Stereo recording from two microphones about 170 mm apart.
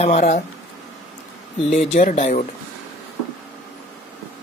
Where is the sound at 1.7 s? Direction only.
45° left (ahead or behind).